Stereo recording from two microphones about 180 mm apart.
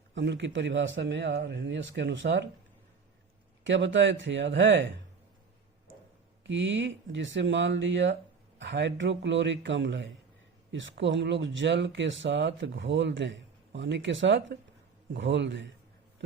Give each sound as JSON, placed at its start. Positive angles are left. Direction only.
{"t": 0.1, "sound": "speech", "side_deg": -75}
{"t": 3.6, "sound": "speech", "side_deg": -85}
{"t": 6.4, "sound": "speech", "side_deg": -90}